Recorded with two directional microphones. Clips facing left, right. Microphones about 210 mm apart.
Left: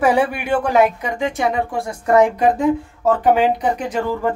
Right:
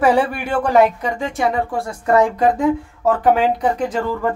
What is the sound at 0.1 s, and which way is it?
Speech, 10° left (ahead or behind).